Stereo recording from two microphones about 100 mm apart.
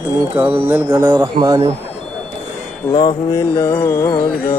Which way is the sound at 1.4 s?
35° right (ahead or behind).